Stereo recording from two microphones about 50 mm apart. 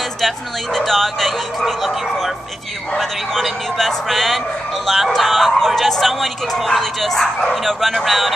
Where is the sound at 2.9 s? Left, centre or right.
Centre.